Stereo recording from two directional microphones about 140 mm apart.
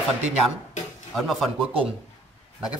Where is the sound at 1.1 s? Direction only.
Centre (ahead or behind).